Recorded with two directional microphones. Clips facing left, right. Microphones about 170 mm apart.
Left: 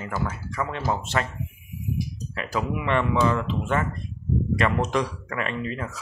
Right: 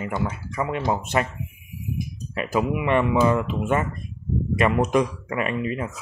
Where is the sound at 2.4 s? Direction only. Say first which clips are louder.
Right 5 dB; 15° right (ahead or behind).